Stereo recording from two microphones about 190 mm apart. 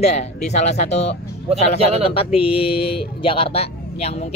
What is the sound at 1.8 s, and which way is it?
Speech, 35° right (ahead or behind).